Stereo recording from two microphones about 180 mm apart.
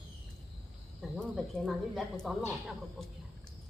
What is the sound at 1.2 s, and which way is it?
Speech, centre (ahead or behind).